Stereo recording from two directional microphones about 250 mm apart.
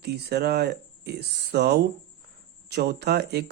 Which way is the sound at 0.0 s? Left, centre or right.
Right.